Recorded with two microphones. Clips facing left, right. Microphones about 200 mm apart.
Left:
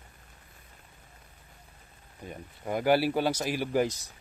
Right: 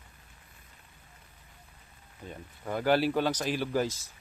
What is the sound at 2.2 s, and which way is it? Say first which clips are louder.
Speech: left 2 dB; 15° left (ahead or behind).